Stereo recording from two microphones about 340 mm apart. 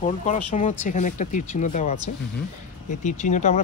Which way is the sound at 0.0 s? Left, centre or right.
Centre.